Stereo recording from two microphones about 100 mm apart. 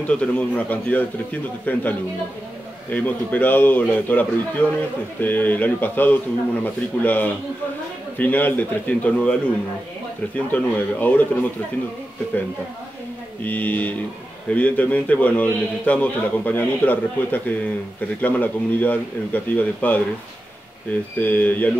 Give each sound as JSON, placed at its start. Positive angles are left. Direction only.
{"t": 0.0, "sound": "a man's voice", "side_deg": 15}
{"t": 10.5, "sound": "a man's voice", "side_deg": 15}
{"t": 13.4, "sound": "a man's voice", "side_deg": 15}
{"t": 21.2, "sound": "a man's voice", "side_deg": 15}